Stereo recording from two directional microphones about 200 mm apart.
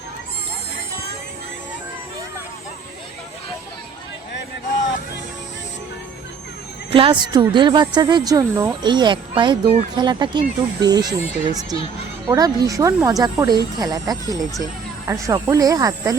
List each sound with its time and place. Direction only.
6.9 s a woman's voice: 25° right (ahead or behind)